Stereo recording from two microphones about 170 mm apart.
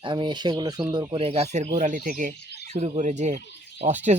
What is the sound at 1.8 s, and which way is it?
Speech, 50° right (ahead or behind).